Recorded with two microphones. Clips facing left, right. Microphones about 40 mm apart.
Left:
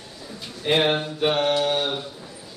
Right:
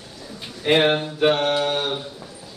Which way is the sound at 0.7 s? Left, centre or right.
Right.